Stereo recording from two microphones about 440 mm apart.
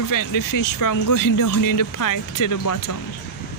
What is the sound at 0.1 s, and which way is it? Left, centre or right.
Speech, left.